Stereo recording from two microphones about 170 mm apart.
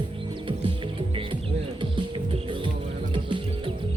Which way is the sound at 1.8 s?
30° right (ahead or behind).